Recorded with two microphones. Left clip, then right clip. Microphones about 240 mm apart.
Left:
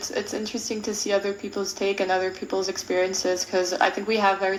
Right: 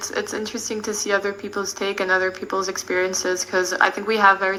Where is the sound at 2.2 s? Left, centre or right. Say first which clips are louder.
Right 3 dB; right.